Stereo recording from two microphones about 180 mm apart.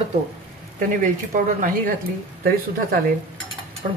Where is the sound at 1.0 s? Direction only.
45° right (ahead or behind).